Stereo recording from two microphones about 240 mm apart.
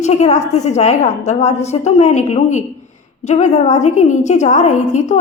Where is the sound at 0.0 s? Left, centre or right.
Left.